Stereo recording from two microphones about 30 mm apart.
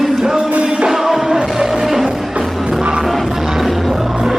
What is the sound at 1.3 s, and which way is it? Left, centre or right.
Music, right.